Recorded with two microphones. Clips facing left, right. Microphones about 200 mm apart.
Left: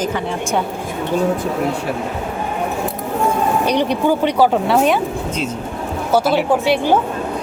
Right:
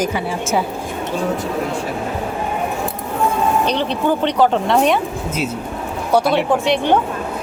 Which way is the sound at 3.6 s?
10° left (ahead or behind).